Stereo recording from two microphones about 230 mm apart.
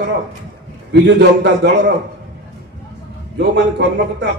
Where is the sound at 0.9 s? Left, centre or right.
Right.